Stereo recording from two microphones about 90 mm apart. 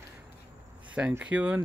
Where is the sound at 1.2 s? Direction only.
15° right (ahead or behind).